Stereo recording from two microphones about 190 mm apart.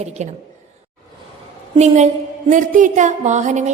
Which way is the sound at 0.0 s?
35° right (ahead or behind).